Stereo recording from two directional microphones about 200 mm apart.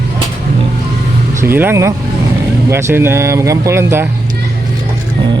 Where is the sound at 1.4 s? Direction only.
10° right (ahead or behind).